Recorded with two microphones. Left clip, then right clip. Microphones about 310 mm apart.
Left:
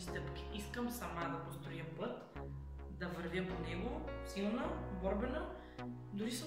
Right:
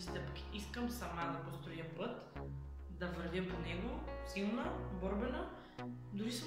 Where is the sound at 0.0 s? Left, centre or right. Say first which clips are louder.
Left 1 dB; centre.